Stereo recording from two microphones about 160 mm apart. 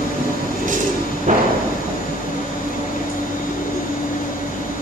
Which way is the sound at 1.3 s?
50° right (ahead or behind).